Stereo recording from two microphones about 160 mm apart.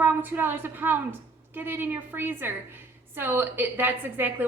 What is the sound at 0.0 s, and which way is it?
A woman's voice, 10° right (ahead or behind).